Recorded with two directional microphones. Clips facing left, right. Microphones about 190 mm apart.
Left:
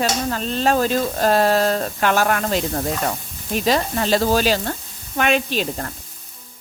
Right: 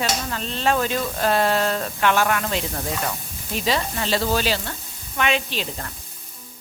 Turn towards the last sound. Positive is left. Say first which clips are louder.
# left 6 dB
turn(degrees=45)  # may be behind; listen again after turning